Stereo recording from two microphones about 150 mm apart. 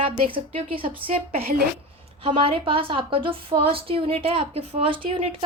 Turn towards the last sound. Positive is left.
turn(degrees=-35)  # may be behind; listen again after turning